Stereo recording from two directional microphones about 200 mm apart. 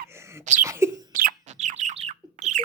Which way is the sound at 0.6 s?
15° right (ahead or behind).